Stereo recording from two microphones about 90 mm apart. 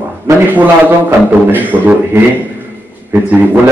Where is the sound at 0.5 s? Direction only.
20° right (ahead or behind).